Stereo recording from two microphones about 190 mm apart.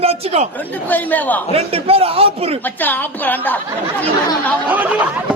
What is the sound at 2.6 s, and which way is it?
Speech, 10° left (ahead or behind).